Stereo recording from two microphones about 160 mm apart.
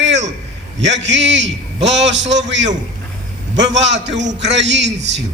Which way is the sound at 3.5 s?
90° right.